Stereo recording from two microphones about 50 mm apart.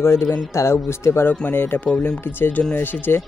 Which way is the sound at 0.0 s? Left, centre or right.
Left.